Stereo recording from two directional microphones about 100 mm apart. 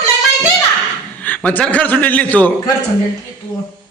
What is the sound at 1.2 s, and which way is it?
A man's voice, 15° left (ahead or behind).